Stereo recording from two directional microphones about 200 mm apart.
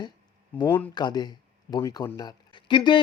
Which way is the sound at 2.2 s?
25° left (ahead or behind).